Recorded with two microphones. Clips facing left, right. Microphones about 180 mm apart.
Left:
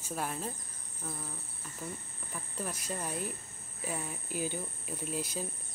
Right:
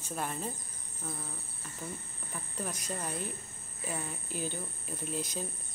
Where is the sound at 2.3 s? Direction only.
5° left (ahead or behind).